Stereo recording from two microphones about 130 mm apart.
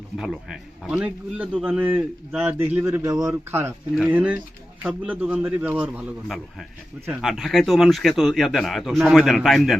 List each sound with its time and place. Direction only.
0.2 s a man's voice: 5° right (ahead or behind); by 3.7 s 20° right (ahead or behind)
4.0 s a man's voice: 10° right (ahead or behind)
6.2 s speech: centre (ahead or behind)